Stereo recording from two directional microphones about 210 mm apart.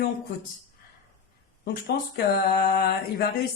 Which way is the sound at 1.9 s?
50° left (ahead or behind).